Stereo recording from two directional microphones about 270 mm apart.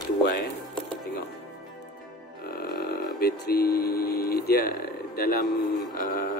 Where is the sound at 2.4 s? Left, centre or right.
Left.